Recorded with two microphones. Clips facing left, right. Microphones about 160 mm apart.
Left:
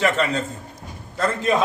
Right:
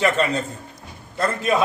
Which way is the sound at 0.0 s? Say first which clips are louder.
Right 1 dB; 15° right (ahead or behind).